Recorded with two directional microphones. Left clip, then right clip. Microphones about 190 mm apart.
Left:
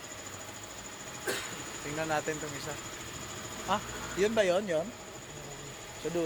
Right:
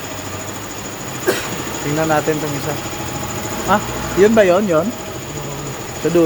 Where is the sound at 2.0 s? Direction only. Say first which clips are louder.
Right 15 dB; centre (ahead or behind).